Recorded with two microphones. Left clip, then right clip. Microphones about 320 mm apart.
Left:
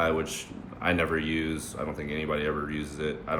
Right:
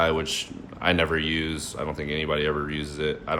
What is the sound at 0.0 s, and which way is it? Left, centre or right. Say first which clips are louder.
Speech: right 4 dB; right.